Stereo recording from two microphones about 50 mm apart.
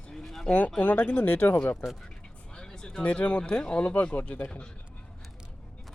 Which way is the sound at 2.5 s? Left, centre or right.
Centre.